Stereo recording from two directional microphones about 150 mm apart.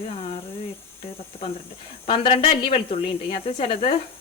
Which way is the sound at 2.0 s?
35° left (ahead or behind).